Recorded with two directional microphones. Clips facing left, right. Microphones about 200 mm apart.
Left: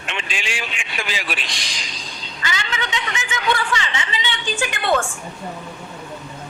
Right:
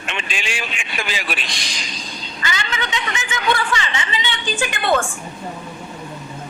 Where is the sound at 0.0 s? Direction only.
50° right (ahead or behind).